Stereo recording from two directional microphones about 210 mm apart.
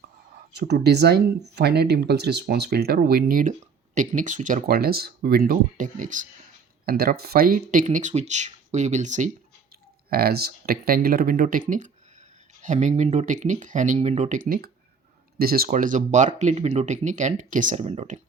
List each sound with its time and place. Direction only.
0.5 s speech: 55° right (ahead or behind); by 9.3 s 35° right (ahead or behind)
10.1 s speech: 45° right (ahead or behind)